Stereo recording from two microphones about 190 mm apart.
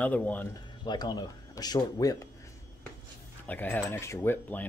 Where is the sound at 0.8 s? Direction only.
20° left (ahead or behind).